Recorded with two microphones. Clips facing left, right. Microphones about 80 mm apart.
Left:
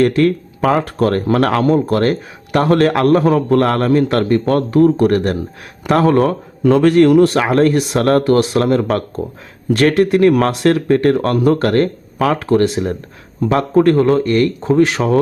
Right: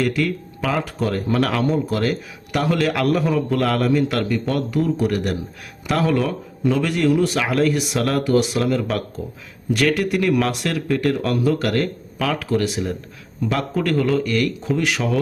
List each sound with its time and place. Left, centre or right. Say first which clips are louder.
0.0 s speech: left 8 dB; left